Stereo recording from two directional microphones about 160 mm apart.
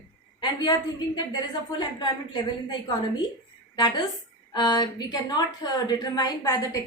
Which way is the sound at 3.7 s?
25° left (ahead or behind).